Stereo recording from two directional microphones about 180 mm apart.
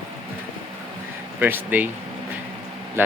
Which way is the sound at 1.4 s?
10° right (ahead or behind).